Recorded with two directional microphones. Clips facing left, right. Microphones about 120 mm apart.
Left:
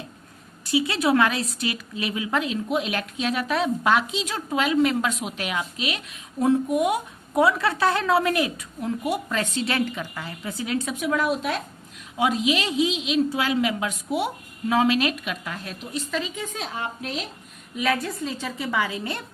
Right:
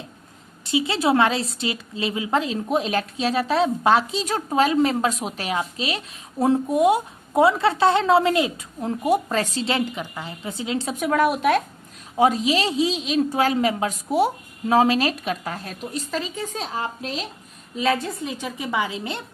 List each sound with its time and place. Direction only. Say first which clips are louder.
0.9 s a woman's voice: right 3 dB; 30° right (ahead or behind)
10.9 s a woman's voice: right 6 dB; 50° right (ahead or behind)
12.1 s a woman's voice: right 4 dB; 35° right (ahead or behind); by 19.2 s 20° right (ahead or behind)